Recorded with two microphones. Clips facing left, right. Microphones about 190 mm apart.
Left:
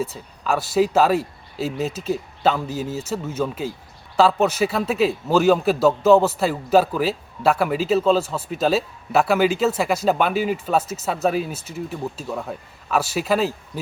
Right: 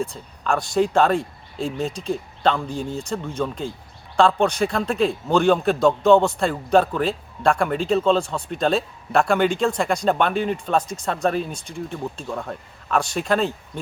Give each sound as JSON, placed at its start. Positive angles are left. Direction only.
{"t": 0.0, "sound": "a man's voice", "side_deg": 5}